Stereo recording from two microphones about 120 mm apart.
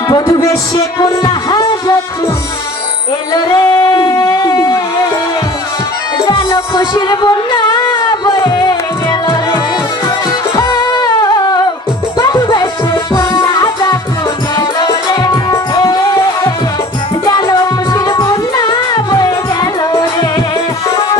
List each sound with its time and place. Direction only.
0.1 s music: 30° left (ahead or behind)
3.5 s singing: 25° left (ahead or behind)
3.9 s a sound: 30° left (ahead or behind)
6.7 s music: 40° left (ahead or behind)
7.7 s a sound: 25° left (ahead or behind)
8.1 s music: 35° left (ahead or behind)
10.5 s music: 35° left (ahead or behind)